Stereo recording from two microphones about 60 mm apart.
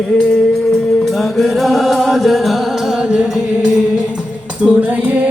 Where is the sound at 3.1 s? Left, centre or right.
Centre.